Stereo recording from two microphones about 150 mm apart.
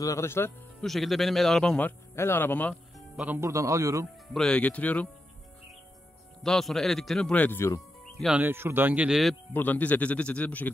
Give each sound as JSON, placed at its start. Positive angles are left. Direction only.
{"t": 0.0, "sound": "speech", "side_deg": 20}
{"t": 0.7, "sound": "speech", "side_deg": 0}
{"t": 3.2, "sound": "speech", "side_deg": -15}
{"t": 4.3, "sound": "speech", "side_deg": 5}
{"t": 6.4, "sound": "speech", "side_deg": 0}
{"t": 8.2, "sound": "speech", "side_deg": -10}
{"t": 9.5, "sound": "speech", "side_deg": 10}